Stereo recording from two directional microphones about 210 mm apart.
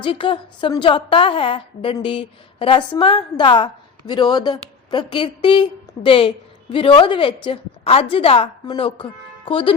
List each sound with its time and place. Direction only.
0.0 s a woman's voice: 25° left (ahead or behind)